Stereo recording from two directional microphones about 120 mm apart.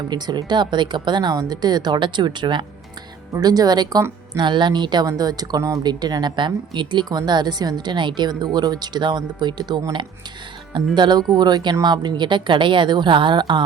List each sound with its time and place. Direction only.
0.1 s a woman's voice: 35° right (ahead or behind)